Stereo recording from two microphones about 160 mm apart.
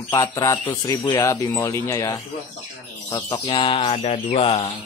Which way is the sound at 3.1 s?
25° left (ahead or behind).